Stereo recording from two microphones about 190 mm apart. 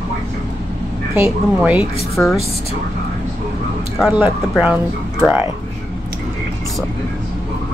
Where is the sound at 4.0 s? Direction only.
5° right (ahead or behind).